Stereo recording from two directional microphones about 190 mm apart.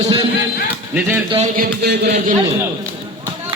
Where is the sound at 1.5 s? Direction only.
55° right (ahead or behind).